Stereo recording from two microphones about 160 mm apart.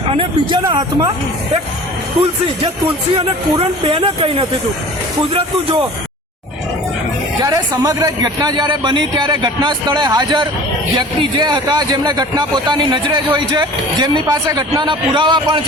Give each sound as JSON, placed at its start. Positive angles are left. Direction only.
{"t": 0.1, "sound": "a man's voice", "side_deg": -30}
{"t": 3.2, "sound": "speech", "side_deg": -35}
{"t": 7.4, "sound": "a man's voice", "side_deg": -20}